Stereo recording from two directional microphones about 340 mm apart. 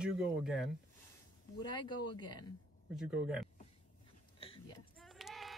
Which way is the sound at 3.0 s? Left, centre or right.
Centre.